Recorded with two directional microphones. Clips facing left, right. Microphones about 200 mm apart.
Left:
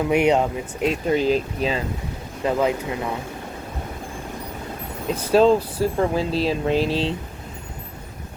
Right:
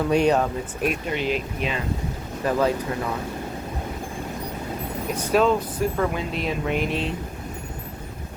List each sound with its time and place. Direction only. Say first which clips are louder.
0.1 s speech: left 2 dB; 15° left (ahead or behind)
1.0 s speech: left 6 dB; 35° left (ahead or behind)
2.4 s speech: left 1 dB; 20° left (ahead or behind)
5.0 s speech: left 4 dB; 30° left (ahead or behind)